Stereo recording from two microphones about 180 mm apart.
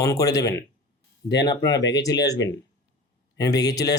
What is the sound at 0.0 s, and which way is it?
Speech, 20° left (ahead or behind).